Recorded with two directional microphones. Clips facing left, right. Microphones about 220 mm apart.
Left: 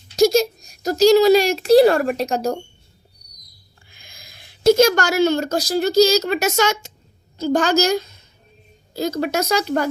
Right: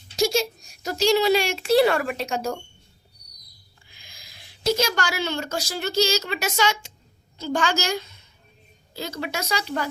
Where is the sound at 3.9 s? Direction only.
50° left (ahead or behind).